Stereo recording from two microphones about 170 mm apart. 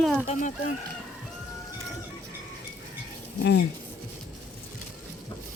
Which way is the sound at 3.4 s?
90° left.